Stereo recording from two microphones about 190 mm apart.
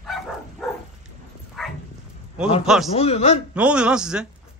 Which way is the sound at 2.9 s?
35° left (ahead or behind).